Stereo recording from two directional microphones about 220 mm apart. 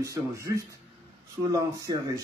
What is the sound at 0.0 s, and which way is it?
Speech, 15° right (ahead or behind).